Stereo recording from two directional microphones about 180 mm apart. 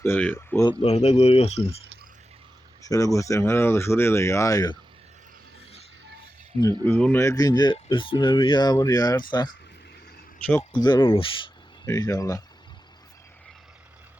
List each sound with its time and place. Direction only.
0.0 s speech: 10° left (ahead or behind)
0.7 s speech: 35° left (ahead or behind)
2.8 s speech: 20° left (ahead or behind)
6.8 s speech: 10° left (ahead or behind)
10.7 s speech: 25° left (ahead or behind)
11.9 s speech: 20° left (ahead or behind)